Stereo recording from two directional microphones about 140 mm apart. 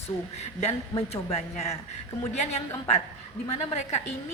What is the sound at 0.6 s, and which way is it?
A woman's voice, 50° left (ahead or behind).